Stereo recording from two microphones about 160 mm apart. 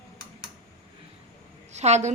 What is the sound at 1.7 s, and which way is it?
Speech, 45° right (ahead or behind).